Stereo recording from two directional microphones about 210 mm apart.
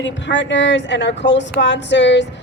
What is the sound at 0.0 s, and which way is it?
A woman's voice, 60° left (ahead or behind).